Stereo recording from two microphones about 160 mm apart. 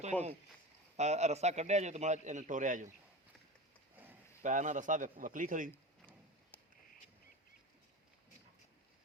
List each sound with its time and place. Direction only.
0.1 s speech: 10° left (ahead or behind)
0.9 s a man's voice: 45° right (ahead or behind)
4.4 s a man's voice: 50° right (ahead or behind)
6.5 s a sound: 10° left (ahead or behind)